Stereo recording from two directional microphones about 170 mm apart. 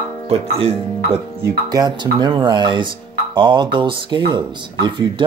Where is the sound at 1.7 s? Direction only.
25° right (ahead or behind).